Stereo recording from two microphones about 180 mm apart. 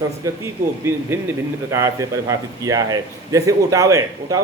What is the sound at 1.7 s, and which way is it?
A man's voice, 15° right (ahead or behind).